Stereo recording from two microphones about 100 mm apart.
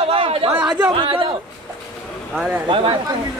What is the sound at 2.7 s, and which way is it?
Speech, 60° right (ahead or behind).